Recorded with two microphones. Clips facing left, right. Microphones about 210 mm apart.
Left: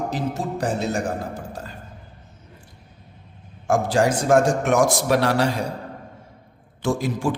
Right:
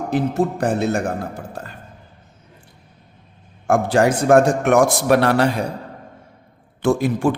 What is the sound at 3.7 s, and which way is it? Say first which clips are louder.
A man's voice: right 3 dB; 60° right (ahead or behind).